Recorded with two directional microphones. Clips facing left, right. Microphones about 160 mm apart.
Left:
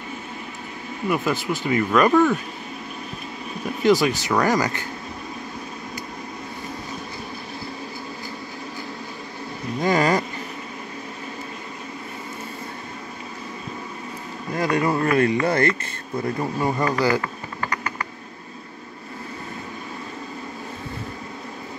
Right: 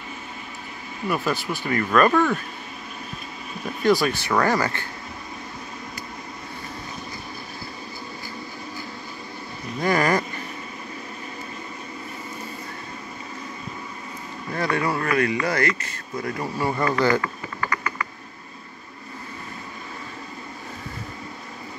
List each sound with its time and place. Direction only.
1.0 s speech: 15° left (ahead or behind)
3.8 s speech: 20° left (ahead or behind)
9.8 s speech: 15° left (ahead or behind)
14.5 s speech: 15° left (ahead or behind)
17.1 s a sound: 30° left (ahead or behind)